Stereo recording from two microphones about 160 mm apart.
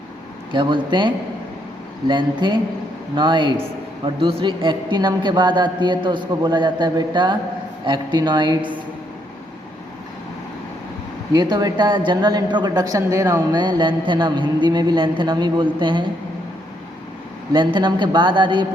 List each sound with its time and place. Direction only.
0.5 s a man's voice: 30° right (ahead or behind)
11.3 s a man's voice: 25° right (ahead or behind)
17.5 s a man's voice: 30° right (ahead or behind)